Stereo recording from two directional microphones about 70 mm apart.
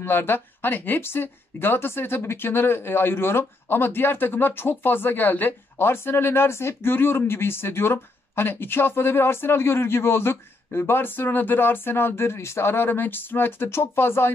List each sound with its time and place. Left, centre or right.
0.0 s speech: left